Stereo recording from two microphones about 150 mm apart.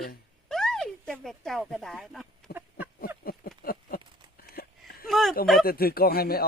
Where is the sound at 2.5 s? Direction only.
90° left.